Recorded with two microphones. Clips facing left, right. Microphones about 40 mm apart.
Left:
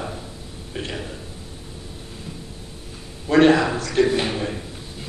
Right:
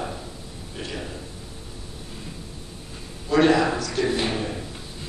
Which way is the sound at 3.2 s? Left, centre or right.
Left.